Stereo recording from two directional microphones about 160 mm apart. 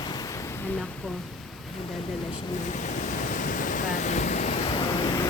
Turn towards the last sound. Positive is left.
turn(degrees=30)  # may be behind; listen again after turning